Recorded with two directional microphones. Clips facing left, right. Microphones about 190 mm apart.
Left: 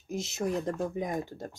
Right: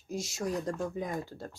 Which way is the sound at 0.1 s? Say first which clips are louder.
Left 2 dB; 20° left (ahead or behind).